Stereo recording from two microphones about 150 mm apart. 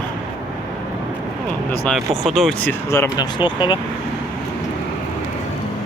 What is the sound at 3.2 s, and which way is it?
Speech, 30° left (ahead or behind).